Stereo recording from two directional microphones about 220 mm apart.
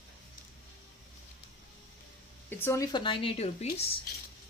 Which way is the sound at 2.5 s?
10° left (ahead or behind).